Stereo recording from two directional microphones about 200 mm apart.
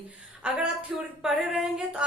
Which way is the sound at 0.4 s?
5° right (ahead or behind).